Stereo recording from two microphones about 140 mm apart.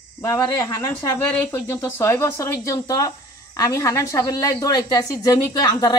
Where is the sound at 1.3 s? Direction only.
15° left (ahead or behind).